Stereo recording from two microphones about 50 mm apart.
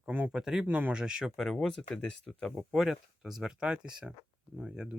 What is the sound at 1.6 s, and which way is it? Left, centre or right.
Speech, centre.